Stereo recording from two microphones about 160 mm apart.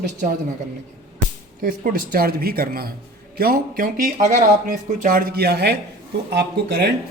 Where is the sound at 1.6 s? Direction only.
65° right (ahead or behind).